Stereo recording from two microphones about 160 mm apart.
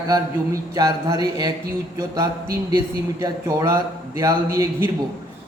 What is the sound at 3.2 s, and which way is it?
Speech, 25° right (ahead or behind).